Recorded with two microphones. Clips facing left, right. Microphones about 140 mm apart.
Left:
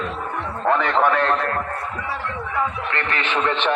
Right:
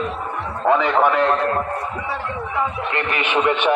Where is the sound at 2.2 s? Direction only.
15° right (ahead or behind).